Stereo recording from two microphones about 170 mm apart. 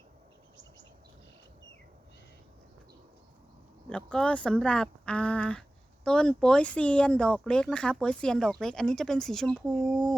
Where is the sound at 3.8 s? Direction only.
5° left (ahead or behind).